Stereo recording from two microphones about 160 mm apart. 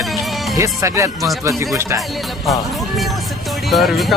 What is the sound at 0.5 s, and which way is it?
Speech, 20° right (ahead or behind).